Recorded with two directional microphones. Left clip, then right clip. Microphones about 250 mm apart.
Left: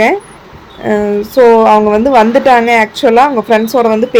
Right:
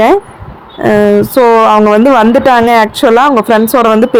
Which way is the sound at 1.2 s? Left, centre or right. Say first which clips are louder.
Even; centre.